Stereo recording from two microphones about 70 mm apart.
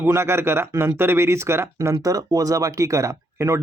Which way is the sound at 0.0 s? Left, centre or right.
Right.